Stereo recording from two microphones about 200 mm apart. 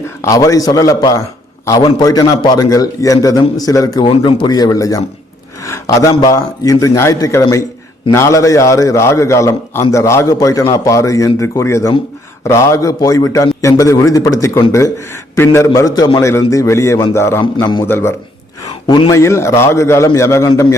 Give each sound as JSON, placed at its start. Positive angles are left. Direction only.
{"t": 0.2, "sound": "a man's voice", "side_deg": 15}
{"t": 17.8, "sound": "a man's voice", "side_deg": 10}
{"t": 18.6, "sound": "a man's voice", "side_deg": 20}